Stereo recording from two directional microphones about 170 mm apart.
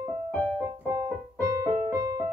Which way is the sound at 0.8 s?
20° right (ahead or behind).